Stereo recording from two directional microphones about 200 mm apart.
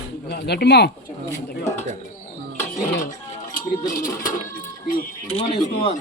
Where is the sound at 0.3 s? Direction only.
55° left (ahead or behind).